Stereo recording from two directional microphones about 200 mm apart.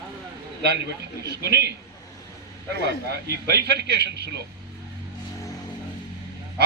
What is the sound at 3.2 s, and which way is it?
A man's voice, 55° right (ahead or behind).